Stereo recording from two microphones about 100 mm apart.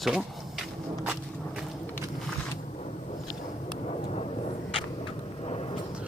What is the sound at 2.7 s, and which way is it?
Vehicle, 90° left.